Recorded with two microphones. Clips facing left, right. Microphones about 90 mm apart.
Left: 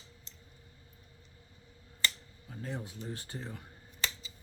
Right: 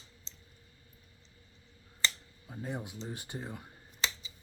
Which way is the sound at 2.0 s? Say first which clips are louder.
Even; 15° right (ahead or behind).